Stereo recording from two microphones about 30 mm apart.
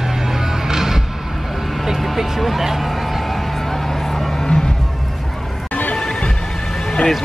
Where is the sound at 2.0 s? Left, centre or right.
Centre.